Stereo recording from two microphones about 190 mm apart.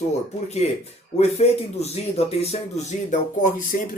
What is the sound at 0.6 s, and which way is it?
Speech, 35° left (ahead or behind).